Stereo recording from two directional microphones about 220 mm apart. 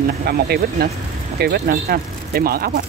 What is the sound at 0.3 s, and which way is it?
Speech, 45° right (ahead or behind).